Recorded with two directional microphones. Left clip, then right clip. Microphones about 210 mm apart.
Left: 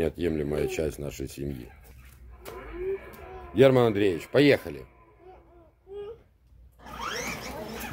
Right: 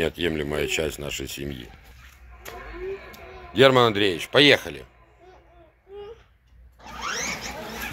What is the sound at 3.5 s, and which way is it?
Speech, centre (ahead or behind).